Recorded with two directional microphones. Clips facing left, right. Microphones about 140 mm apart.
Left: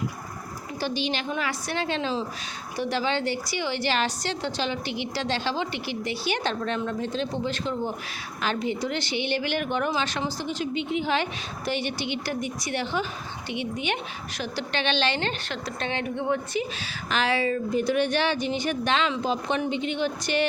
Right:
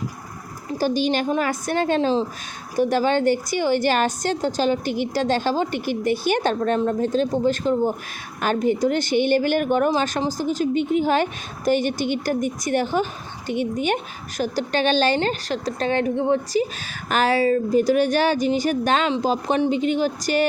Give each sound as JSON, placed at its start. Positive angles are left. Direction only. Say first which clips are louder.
{"t": 0.7, "sound": "a woman's voice", "louder": "right 8 dB", "side_deg": -45}
{"t": 17.1, "sound": "a woman's voice", "louder": "right 6 dB", "side_deg": -45}